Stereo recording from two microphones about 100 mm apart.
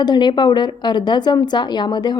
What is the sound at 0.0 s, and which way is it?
Speech, 50° left (ahead or behind).